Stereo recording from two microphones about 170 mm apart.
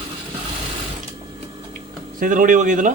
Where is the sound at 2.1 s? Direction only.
50° right (ahead or behind).